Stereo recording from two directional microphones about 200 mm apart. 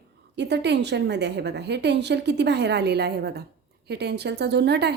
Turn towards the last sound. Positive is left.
turn(degrees=-55)  # may be behind; listen again after turning